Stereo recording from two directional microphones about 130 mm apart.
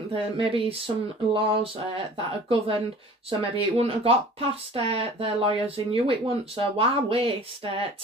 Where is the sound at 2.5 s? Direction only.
40° right (ahead or behind).